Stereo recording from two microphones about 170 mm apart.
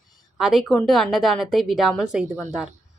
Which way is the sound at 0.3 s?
Centre (ahead or behind).